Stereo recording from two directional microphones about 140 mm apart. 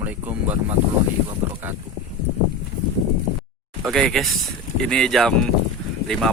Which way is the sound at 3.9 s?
Centre (ahead or behind).